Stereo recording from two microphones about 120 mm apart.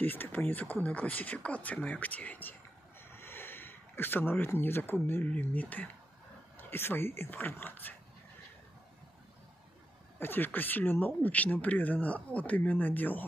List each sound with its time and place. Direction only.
0.0 s speech: 15° left (ahead or behind)
10.1 s speech: 15° left (ahead or behind)